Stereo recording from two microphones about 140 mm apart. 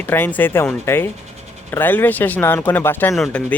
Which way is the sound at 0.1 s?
15° left (ahead or behind).